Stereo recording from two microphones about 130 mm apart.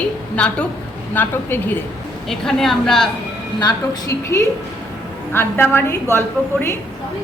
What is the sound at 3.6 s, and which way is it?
Speech, 35° left (ahead or behind).